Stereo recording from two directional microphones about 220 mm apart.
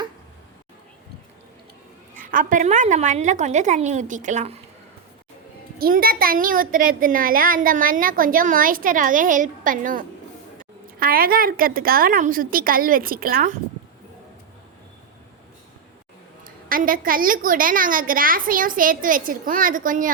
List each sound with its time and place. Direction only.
2.1 s a child's voice: 40° right (ahead or behind)
5.8 s a child's voice: 40° right (ahead or behind)
16.4 s a child's voice: 40° right (ahead or behind)